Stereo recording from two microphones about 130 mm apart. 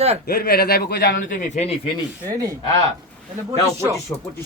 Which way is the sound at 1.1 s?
85° left.